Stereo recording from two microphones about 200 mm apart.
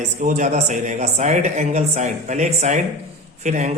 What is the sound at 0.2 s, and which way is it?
Speech, 40° right (ahead or behind).